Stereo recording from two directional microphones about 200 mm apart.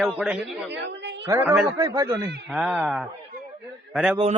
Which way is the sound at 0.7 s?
60° right (ahead or behind).